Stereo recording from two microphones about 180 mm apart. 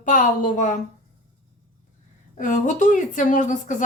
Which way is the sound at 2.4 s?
45° left (ahead or behind).